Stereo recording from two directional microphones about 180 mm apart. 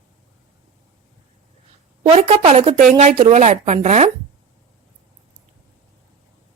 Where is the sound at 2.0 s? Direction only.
35° right (ahead or behind).